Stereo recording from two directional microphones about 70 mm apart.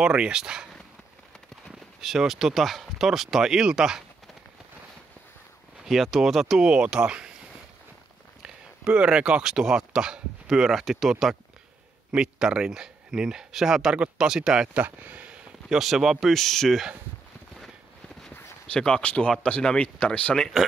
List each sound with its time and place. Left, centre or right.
0.0 s speech: centre
2.0 s speech: centre
5.9 s speech: centre
6.7 s speech: centre
8.4 s speech: centre
14.8 s speech: right
15.7 s speech: centre
18.7 s speech: centre